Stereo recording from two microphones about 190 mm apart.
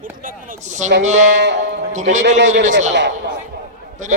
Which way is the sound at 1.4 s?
65° right (ahead or behind).